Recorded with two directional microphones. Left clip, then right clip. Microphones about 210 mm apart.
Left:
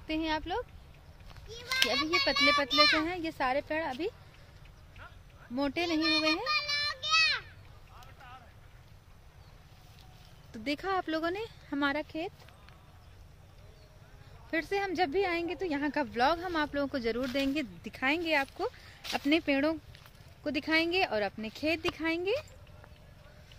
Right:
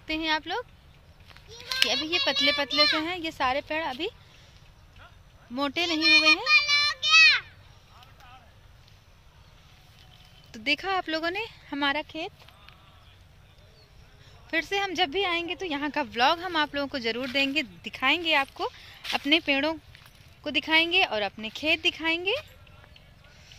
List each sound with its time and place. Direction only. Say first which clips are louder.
0.0 s speech: right 5 dB; 15° right (ahead or behind)
1.7 s speech: right 3 dB; 10° right (ahead or behind)
5.5 s speech: right 4 dB; 15° right (ahead or behind)
6.5 s child singing: right 10 dB; 5° left (ahead or behind)
10.5 s speech: right 6 dB; centre (ahead or behind)
14.5 s speech: right 4 dB; 10° right (ahead or behind)